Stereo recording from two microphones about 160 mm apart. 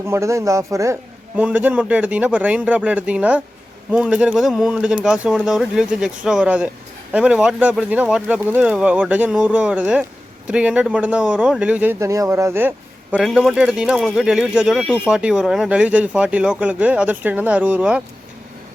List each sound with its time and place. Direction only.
0.0 s speech: 15° right (ahead or behind)
1.4 s speech: 10° right (ahead or behind)